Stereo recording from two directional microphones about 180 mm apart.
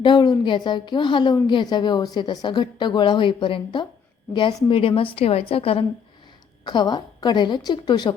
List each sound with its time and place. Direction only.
0.0 s a woman's voice: 25° left (ahead or behind)